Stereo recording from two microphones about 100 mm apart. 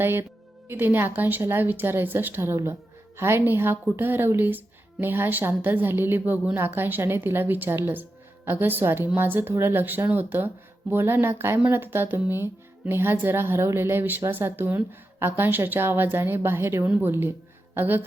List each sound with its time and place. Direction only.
0.0 s a woman's voice: 20° right (ahead or behind)